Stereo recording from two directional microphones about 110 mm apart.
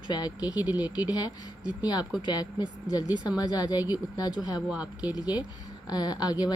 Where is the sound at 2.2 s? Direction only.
40° left (ahead or behind).